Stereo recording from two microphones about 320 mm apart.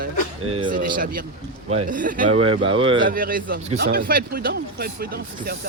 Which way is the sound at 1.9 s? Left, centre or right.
Right.